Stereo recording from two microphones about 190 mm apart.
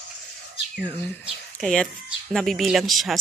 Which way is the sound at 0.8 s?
10° left (ahead or behind).